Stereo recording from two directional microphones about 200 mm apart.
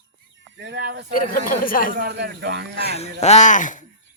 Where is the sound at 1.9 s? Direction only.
55° right (ahead or behind).